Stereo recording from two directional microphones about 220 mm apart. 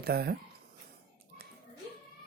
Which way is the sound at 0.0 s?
45° right (ahead or behind).